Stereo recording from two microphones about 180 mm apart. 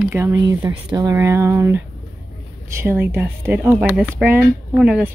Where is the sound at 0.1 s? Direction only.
15° right (ahead or behind).